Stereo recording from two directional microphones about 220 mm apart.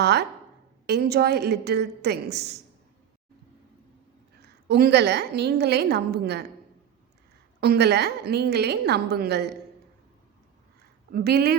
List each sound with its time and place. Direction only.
0.0 s a woman's voice: 50° right (ahead or behind)
4.4 s a woman's voice: 50° right (ahead or behind)
7.6 s a woman's voice: 45° right (ahead or behind)
11.1 s a woman's voice: 45° right (ahead or behind)